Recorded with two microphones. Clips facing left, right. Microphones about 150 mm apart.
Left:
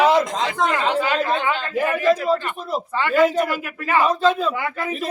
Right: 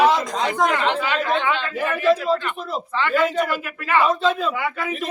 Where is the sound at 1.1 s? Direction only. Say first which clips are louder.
Even; 40° left (ahead or behind).